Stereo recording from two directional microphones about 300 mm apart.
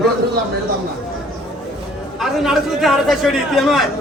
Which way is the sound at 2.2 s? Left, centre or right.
Centre.